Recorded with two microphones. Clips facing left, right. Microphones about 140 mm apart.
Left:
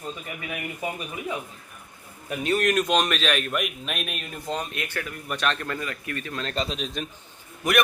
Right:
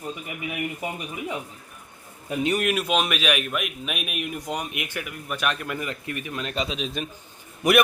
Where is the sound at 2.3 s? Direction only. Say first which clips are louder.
Left 1 dB; 15° right (ahead or behind).